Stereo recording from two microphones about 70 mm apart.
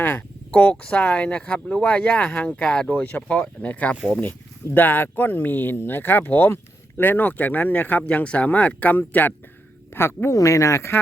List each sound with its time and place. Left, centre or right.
0.0 s speech: left
10.3 s speech: left